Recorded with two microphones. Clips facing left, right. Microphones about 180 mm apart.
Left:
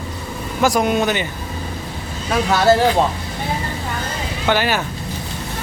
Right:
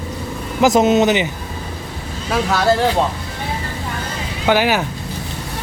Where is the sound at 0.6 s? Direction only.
20° right (ahead or behind).